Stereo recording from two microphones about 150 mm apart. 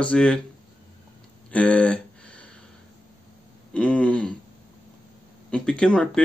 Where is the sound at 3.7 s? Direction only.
5° left (ahead or behind).